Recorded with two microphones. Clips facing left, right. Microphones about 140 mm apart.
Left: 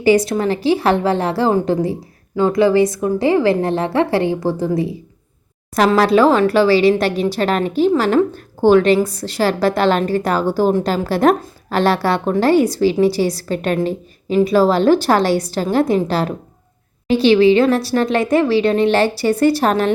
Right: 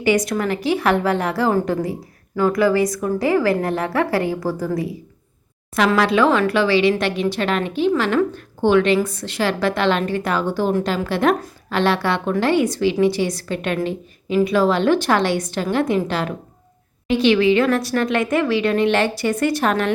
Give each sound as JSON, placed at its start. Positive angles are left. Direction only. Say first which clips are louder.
{"t": 0.0, "sound": "speech", "louder": "left 4 dB", "side_deg": 30}
{"t": 5.7, "sound": "a woman's voice", "louder": "left 4 dB", "side_deg": 40}